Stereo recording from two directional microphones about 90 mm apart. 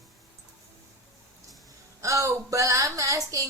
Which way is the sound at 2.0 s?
35° right (ahead or behind).